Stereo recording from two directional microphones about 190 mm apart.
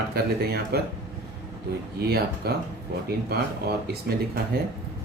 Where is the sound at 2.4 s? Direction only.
55° right (ahead or behind).